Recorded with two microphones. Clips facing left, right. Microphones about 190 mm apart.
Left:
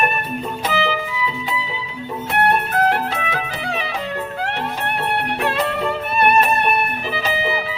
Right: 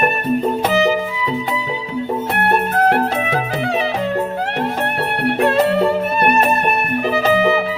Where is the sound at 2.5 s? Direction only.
40° right (ahead or behind).